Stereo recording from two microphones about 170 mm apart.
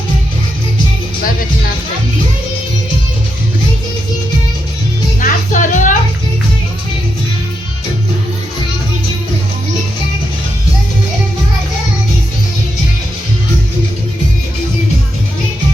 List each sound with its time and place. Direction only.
5.2 s music: 50° left (ahead or behind)